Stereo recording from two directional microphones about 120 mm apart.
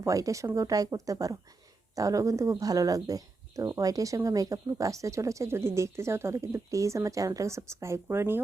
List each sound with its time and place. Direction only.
0.0 s speech: 25° right (ahead or behind)